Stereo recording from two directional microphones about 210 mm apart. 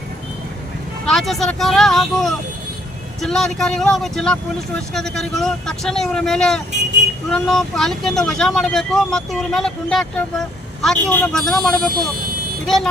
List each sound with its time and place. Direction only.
1.0 s speech: centre (ahead or behind)